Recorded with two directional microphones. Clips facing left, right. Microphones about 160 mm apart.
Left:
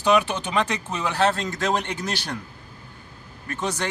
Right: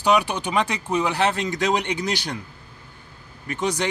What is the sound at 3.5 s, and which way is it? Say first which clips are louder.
Speech: right 3 dB; 15° right (ahead or behind).